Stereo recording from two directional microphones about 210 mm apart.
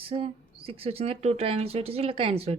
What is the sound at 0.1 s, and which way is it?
Speech, 25° right (ahead or behind).